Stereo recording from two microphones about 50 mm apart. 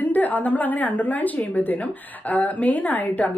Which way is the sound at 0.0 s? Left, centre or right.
Left.